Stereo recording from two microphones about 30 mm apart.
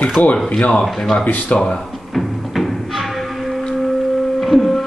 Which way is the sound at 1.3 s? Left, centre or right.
Left.